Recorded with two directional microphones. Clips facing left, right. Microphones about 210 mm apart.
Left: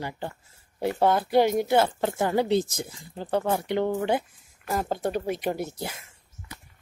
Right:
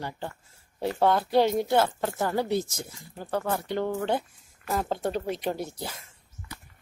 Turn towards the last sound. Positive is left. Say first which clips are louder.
# left 2 dB
turn(degrees=15)  # may be behind; listen again after turning